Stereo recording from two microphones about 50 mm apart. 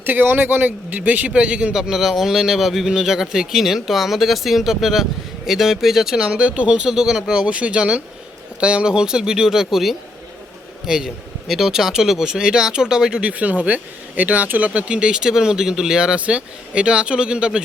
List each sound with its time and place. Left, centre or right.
0.0 s speech: right
1.3 s speech: right
1.7 s speech: centre
7.4 s speech: right
13.3 s speech: right
14.7 s speech: right